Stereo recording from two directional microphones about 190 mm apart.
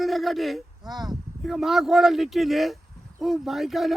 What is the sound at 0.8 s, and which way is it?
Speech, 20° right (ahead or behind).